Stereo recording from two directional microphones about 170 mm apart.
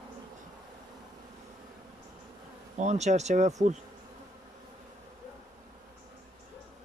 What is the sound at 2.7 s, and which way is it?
Speech, 45° right (ahead or behind).